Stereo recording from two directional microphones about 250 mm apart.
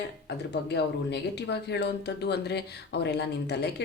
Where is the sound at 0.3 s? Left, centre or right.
Left.